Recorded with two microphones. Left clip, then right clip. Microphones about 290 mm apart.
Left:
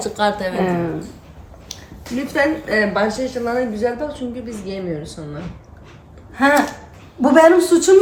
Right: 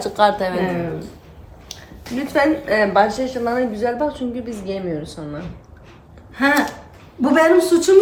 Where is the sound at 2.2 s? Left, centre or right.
Centre.